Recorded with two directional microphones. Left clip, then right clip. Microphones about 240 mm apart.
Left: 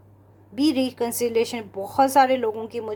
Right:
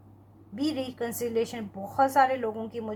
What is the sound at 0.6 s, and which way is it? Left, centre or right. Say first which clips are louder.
A woman's voice: left 8 dB; left.